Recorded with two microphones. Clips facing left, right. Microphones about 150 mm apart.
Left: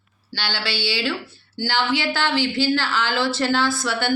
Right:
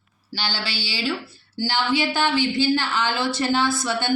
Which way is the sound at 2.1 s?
15° right (ahead or behind).